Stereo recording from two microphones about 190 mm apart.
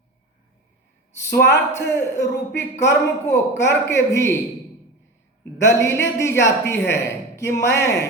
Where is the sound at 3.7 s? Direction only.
15° left (ahead or behind).